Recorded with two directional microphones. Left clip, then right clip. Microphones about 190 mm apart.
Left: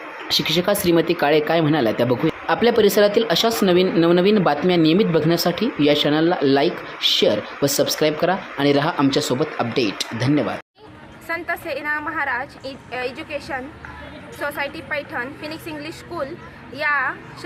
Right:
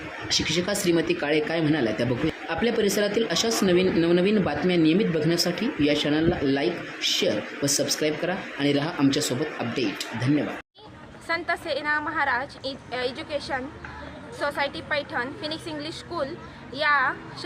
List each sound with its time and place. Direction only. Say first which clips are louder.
0.3 s a man's voice: left 6 dB; 20° left (ahead or behind)